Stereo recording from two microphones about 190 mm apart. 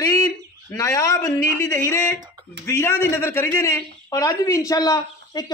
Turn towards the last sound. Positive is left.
turn(degrees=20)  # may be behind; listen again after turning